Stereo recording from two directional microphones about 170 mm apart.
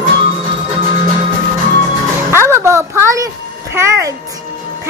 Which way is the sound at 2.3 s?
15° right (ahead or behind).